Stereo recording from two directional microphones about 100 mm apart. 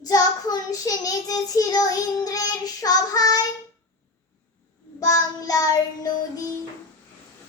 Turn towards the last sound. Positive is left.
turn(degrees=40)  # may be behind; listen again after turning